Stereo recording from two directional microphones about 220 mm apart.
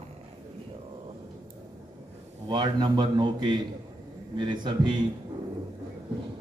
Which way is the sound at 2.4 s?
20° right (ahead or behind).